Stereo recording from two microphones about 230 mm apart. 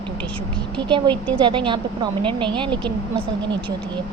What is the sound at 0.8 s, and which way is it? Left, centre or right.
A woman's voice, right.